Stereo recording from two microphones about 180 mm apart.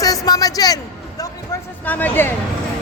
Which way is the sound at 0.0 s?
20° left (ahead or behind).